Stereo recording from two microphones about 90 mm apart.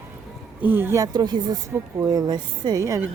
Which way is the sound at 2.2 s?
50° right (ahead or behind).